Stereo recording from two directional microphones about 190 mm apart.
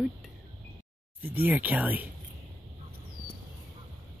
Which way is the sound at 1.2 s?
10° right (ahead or behind).